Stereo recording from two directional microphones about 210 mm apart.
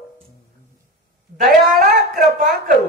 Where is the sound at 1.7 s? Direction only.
40° right (ahead or behind).